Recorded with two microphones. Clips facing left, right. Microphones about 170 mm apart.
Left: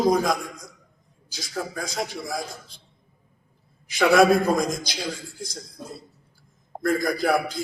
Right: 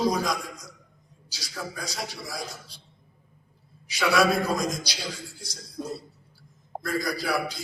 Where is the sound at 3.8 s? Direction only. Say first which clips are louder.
Left 6 dB; 50° left (ahead or behind).